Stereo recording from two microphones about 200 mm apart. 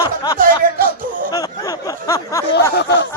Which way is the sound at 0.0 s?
20° left (ahead or behind).